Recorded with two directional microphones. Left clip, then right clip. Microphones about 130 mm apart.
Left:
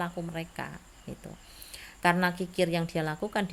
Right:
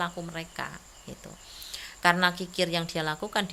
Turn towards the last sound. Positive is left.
turn(degrees=40)  # may be behind; listen again after turning